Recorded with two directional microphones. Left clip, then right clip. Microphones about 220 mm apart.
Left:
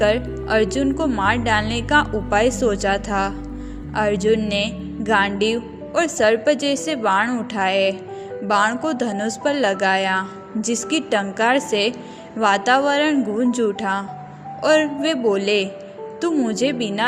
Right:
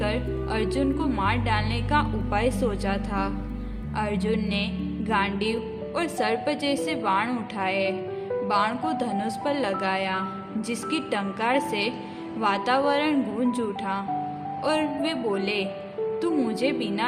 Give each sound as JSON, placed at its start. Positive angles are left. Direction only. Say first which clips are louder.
{"t": 0.0, "sound": "speech", "louder": "left 9 dB", "side_deg": 25}